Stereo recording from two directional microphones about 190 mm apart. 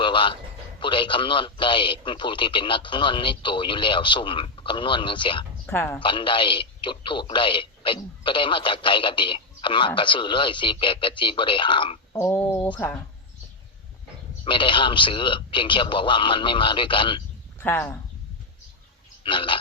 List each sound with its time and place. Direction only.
0.0 s music: 25° left (ahead or behind)
0.8 s a man's voice: 25° left (ahead or behind)
5.6 s speech: 15° left (ahead or behind)
6.0 s a man's voice: 25° left (ahead or behind)
12.1 s speech: 10° left (ahead or behind)
14.4 s a man's voice: 25° left (ahead or behind)
17.6 s speech: 10° left (ahead or behind)
19.2 s a man's voice: 25° left (ahead or behind)